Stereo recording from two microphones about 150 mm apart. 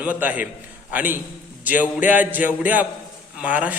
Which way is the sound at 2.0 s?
10° right (ahead or behind).